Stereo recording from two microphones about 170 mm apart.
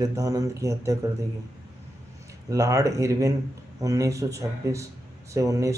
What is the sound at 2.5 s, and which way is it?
Speech, 20° right (ahead or behind).